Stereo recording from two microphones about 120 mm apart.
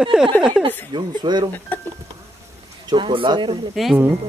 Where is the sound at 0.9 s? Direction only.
40° right (ahead or behind).